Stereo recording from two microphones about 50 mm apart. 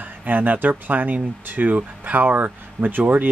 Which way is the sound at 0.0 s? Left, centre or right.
Right.